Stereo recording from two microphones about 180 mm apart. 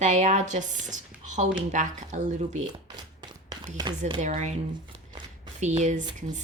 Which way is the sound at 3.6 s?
25° right (ahead or behind).